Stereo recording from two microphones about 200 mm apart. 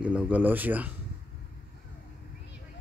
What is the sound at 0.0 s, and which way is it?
Speech, 5° right (ahead or behind).